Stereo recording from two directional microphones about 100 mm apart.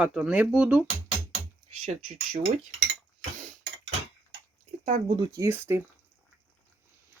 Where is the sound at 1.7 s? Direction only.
90° right.